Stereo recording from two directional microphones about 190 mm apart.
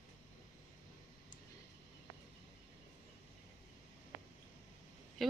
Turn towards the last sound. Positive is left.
turn(degrees=0)  # may be behind; listen again after turning